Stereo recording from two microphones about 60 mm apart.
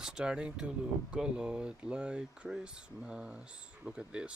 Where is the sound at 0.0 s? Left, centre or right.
Centre.